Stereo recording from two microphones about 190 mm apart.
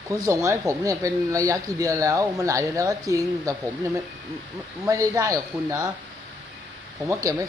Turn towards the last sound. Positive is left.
turn(degrees=-15)  # may be behind; listen again after turning